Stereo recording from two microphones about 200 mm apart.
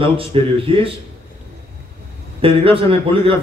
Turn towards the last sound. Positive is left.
turn(degrees=-25)  # may be behind; listen again after turning